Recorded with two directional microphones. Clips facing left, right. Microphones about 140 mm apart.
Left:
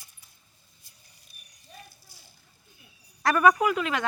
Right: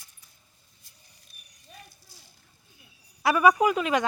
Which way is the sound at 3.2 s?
10° right (ahead or behind).